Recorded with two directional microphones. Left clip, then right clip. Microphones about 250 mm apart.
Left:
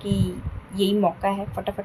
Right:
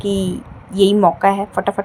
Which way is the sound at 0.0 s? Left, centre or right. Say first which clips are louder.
Right 9 dB; right.